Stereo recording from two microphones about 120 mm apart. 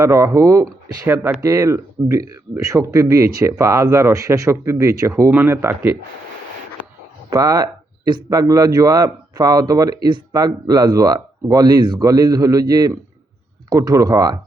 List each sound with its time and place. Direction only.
0.0 s speech: 25° right (ahead or behind)
7.3 s speech: 30° right (ahead or behind)